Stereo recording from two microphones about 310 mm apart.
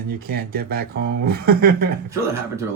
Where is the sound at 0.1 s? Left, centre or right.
Right.